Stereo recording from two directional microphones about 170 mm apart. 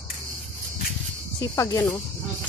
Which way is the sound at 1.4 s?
20° left (ahead or behind).